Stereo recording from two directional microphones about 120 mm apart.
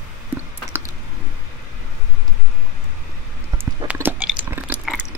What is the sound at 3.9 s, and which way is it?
Chewing, 15° right (ahead or behind).